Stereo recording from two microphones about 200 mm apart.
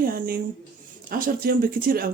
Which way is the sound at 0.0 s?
45° right (ahead or behind).